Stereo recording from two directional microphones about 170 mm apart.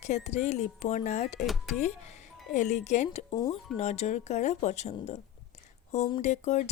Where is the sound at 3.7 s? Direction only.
40° left (ahead or behind).